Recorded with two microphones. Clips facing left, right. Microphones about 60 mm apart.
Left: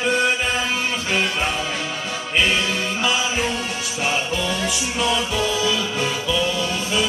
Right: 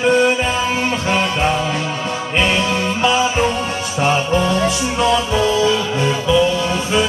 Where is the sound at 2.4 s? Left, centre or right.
Right.